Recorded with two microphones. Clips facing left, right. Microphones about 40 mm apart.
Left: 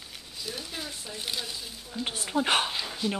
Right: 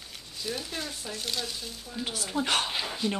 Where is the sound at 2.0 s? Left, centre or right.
Left.